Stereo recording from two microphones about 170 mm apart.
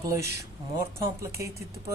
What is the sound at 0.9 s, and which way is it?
Speech, 15° right (ahead or behind).